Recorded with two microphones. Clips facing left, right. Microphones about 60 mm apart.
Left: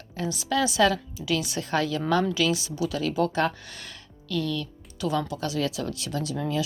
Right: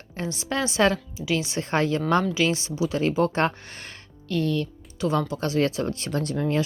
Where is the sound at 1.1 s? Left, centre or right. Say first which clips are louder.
Right 2 dB; right.